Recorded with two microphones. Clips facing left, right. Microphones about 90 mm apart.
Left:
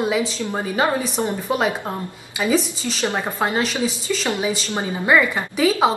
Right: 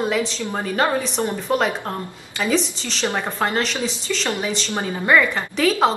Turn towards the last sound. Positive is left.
turn(degrees=10)  # may be behind; listen again after turning